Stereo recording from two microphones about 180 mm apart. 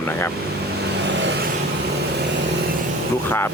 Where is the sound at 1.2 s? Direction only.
85° right.